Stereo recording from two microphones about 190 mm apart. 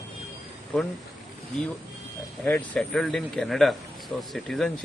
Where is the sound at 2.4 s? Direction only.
5° left (ahead or behind).